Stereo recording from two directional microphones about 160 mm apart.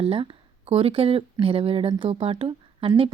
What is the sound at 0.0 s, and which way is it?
Speech, 35° right (ahead or behind).